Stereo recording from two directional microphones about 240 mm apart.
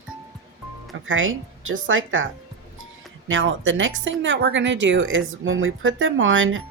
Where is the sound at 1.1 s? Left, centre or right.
Right.